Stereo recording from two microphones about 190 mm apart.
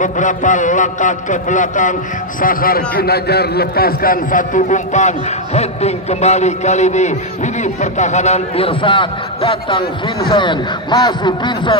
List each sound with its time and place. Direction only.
0.0 s a man's voice: 40° left (ahead or behind); by 11.7 s 25° left (ahead or behind)